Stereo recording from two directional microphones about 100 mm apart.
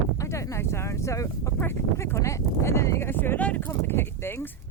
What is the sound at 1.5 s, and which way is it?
Speech, 20° left (ahead or behind).